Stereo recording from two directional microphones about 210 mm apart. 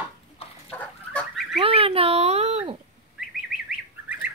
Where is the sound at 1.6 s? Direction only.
25° right (ahead or behind).